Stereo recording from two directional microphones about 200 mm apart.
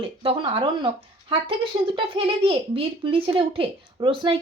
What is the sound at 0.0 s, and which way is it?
Speech, 25° right (ahead or behind).